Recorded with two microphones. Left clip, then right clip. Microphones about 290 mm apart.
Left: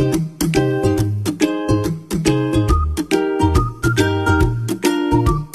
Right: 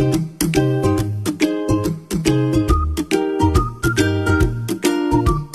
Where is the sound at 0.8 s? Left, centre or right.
Left.